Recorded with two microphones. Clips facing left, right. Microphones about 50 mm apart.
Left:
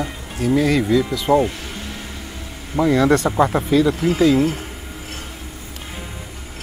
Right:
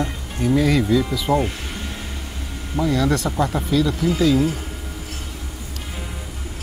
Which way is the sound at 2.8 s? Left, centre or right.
Left.